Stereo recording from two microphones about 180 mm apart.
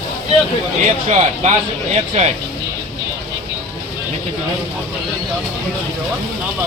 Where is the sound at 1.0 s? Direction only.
40° right (ahead or behind).